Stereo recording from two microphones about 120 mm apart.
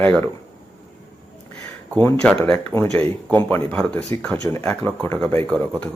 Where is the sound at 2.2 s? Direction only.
10° left (ahead or behind).